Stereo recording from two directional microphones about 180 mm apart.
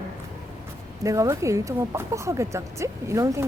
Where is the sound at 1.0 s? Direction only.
15° right (ahead or behind).